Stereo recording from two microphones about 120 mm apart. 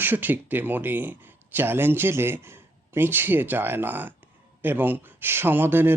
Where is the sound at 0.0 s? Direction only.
15° right (ahead or behind).